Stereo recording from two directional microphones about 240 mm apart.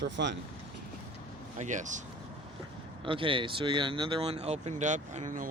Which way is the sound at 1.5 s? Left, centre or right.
Right.